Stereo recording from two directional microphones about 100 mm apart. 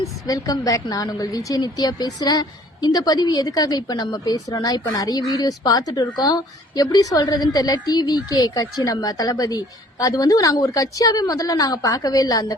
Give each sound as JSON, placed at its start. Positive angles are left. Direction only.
{"t": 0.3, "sound": "a woman's voice", "side_deg": 40}